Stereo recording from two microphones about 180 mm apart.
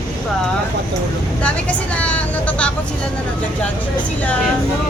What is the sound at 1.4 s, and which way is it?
Speech, 5° left (ahead or behind).